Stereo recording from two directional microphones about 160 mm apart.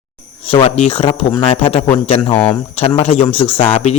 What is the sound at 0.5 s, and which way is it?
Speech, 40° left (ahead or behind).